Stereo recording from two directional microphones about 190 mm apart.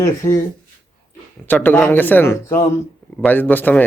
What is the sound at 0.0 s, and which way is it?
Speech, 15° left (ahead or behind).